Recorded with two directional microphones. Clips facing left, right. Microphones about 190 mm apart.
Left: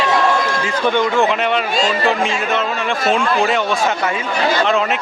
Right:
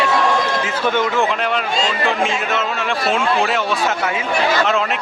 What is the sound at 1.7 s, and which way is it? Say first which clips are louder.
Speech: left 2 dB; 25° right (ahead or behind).